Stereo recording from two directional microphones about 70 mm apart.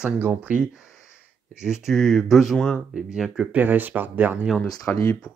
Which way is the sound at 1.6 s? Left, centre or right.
Centre.